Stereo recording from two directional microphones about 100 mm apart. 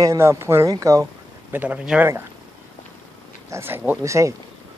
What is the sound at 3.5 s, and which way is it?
Speech, 25° right (ahead or behind).